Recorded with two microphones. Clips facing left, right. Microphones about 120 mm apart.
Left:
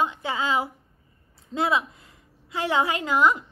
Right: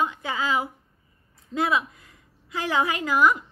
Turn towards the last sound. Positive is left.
turn(degrees=25)  # may be behind; listen again after turning